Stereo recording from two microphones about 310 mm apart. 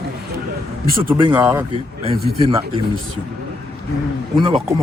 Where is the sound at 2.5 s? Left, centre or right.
Centre.